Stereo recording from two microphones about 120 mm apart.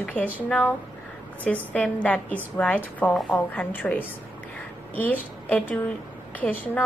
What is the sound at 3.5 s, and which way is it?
A woman's voice, 15° left (ahead or behind).